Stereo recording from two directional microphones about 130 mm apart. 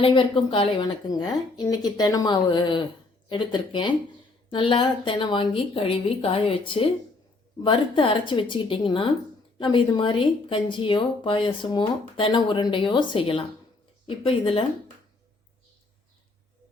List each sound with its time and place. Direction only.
0.0 s speech: 40° left (ahead or behind)